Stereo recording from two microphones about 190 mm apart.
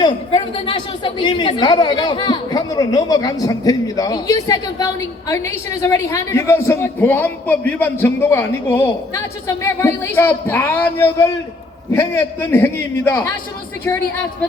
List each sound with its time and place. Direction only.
0.0 s a woman's voice: 25° left (ahead or behind)